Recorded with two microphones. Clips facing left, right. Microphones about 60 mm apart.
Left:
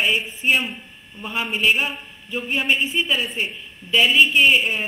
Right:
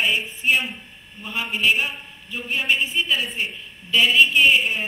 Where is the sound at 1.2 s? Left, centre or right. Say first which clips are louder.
Left 2 dB; centre.